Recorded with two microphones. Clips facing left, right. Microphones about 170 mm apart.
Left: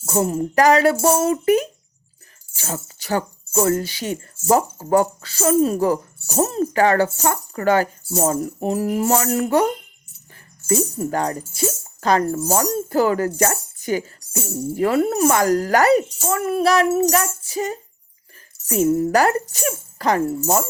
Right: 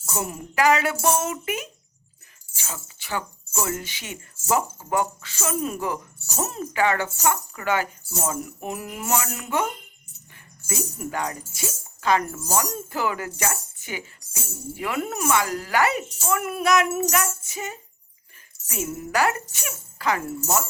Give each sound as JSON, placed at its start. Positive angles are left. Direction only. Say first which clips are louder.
{"t": 0.1, "sound": "speech", "louder": "left 10 dB", "side_deg": 35}
{"t": 10.9, "sound": "speech", "louder": "left 7 dB", "side_deg": 35}